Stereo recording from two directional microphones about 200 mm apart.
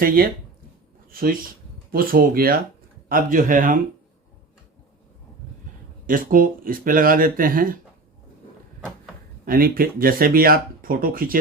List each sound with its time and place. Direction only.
1.1 s speech: 45° right (ahead or behind)
6.1 s speech: 45° right (ahead or behind)
9.5 s speech: 45° right (ahead or behind)